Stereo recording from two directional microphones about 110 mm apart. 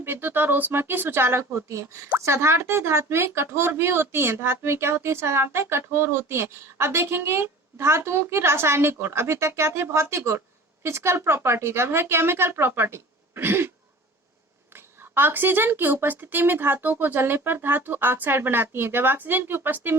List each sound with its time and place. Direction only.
0.0 s speech: 20° right (ahead or behind)
15.1 s speech: 20° right (ahead or behind)